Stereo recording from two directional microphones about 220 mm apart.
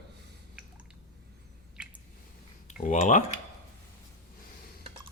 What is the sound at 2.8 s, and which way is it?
Speech, 35° left (ahead or behind).